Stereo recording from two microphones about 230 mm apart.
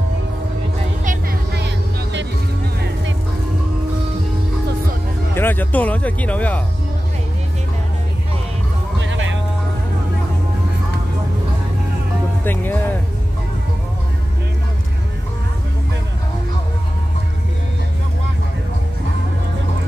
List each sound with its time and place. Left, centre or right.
1.0 s music: right
5.3 s speech: centre
9.0 s music: right
12.4 s music: centre